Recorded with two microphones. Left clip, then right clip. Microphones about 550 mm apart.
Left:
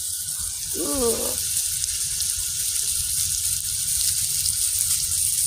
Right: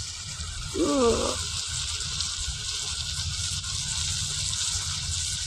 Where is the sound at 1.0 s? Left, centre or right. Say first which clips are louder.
Even; left.